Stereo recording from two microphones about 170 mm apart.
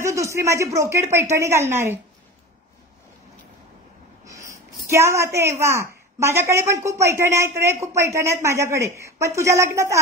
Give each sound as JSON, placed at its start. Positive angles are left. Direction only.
{"t": 0.0, "sound": "a woman's voice", "side_deg": -15}
{"t": 4.2, "sound": "a sound", "side_deg": -20}
{"t": 4.8, "sound": "a woman's voice", "side_deg": -15}